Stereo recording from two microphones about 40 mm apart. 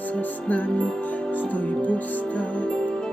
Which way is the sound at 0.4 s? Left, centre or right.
Left.